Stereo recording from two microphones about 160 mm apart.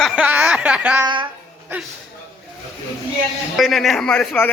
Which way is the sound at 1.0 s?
30° right (ahead or behind).